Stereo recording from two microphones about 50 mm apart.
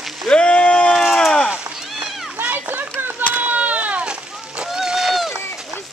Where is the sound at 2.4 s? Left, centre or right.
Right.